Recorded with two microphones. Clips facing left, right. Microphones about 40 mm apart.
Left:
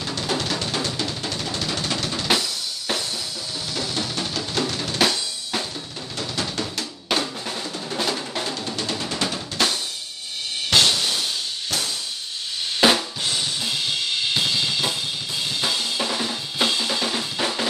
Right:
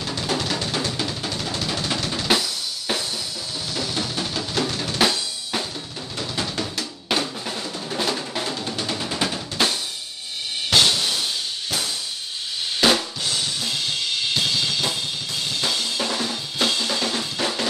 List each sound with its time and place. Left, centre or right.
0.3 s music: centre
0.8 s drum: centre
3.7 s drum: centre
6.1 s music: centre
6.6 s drum: centre
10.7 s music: centre
12.8 s drum kit: centre
14.3 s drum kit: centre